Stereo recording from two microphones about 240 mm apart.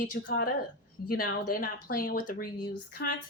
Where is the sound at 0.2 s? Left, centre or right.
Left.